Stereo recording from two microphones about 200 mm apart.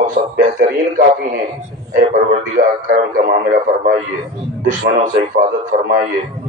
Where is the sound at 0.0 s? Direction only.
40° right (ahead or behind).